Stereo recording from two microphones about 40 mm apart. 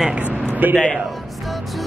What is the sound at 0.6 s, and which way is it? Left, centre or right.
Speech, right.